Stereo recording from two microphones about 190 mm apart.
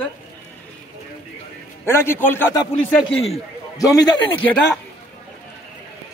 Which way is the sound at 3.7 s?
20° left (ahead or behind).